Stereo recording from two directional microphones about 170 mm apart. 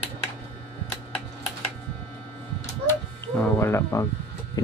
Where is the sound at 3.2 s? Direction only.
15° left (ahead or behind).